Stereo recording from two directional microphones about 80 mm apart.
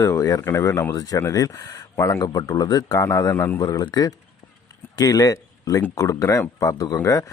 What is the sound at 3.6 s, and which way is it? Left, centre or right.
Speech, left.